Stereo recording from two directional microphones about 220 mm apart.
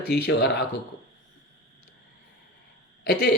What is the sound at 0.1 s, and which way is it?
Speech, 50° left (ahead or behind).